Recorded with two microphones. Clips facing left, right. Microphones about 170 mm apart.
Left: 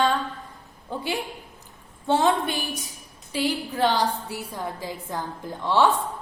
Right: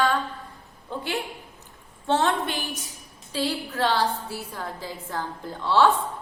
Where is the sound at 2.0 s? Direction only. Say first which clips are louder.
Left 2 dB; 10° left (ahead or behind).